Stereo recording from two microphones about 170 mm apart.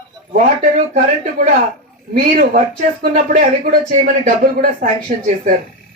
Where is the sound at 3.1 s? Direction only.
60° right (ahead or behind).